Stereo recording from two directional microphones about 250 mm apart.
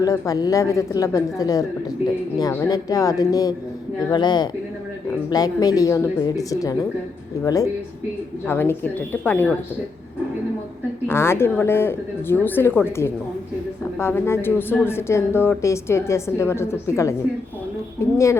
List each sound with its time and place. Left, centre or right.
0.0 s a woman's voice: centre
11.1 s a woman's voice: centre